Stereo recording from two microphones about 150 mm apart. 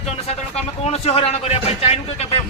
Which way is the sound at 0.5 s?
45° left (ahead or behind).